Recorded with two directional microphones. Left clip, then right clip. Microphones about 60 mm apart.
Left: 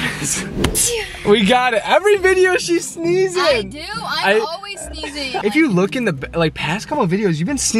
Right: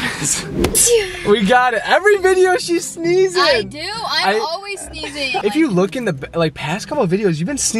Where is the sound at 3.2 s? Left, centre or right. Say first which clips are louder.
Right 2 dB; right.